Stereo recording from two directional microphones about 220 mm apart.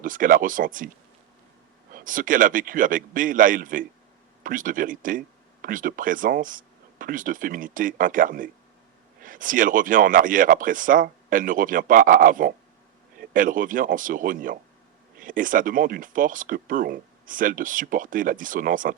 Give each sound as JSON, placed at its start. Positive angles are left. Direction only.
{"t": 0.0, "sound": "speech", "side_deg": -40}
{"t": 1.9, "sound": "speech", "side_deg": -40}